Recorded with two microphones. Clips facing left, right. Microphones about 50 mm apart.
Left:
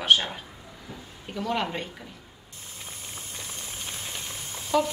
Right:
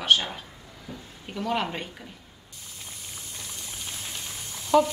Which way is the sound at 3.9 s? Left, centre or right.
Left.